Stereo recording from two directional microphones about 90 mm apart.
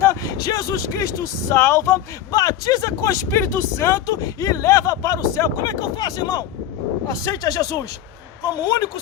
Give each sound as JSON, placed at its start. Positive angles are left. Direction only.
{"t": 0.2, "sound": "speech", "side_deg": 45}
{"t": 2.3, "sound": "speech", "side_deg": 45}
{"t": 5.8, "sound": "speech", "side_deg": 50}